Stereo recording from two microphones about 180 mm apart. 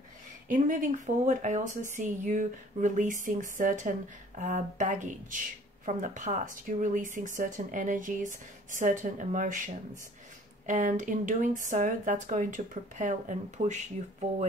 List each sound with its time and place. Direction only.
0.5 s speech: 50° right (ahead or behind)
10.7 s speech: 45° right (ahead or behind)